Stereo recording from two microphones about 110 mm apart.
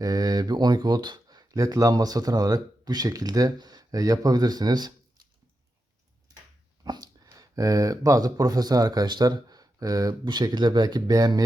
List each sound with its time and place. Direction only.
0.0 s speech: 35° right (ahead or behind)
6.8 s speech: 35° right (ahead or behind)